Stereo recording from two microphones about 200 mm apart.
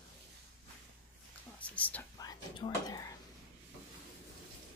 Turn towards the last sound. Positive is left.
turn(degrees=20)  # may be behind; listen again after turning